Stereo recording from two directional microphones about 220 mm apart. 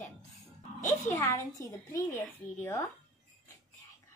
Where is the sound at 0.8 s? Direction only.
15° left (ahead or behind).